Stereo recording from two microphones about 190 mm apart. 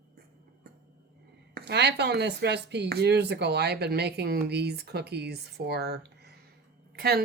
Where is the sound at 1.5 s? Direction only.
60° right (ahead or behind).